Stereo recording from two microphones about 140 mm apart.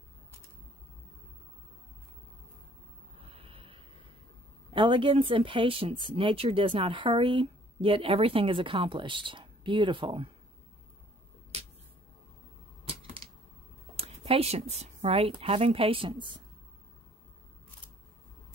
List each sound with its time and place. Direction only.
3.3 s snort: 40° right (ahead or behind)
4.7 s speech: 35° right (ahead or behind)
12.8 s typewriter: 40° right (ahead or behind)
13.9 s speech: 45° right (ahead or behind)